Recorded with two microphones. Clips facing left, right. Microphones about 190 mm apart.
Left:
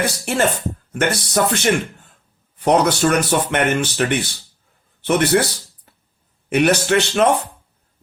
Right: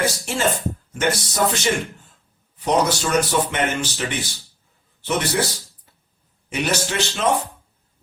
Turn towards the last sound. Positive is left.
turn(degrees=60)  # may be behind; listen again after turning